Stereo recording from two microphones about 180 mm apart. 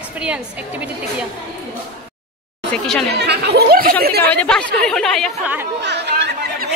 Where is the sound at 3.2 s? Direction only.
65° right (ahead or behind).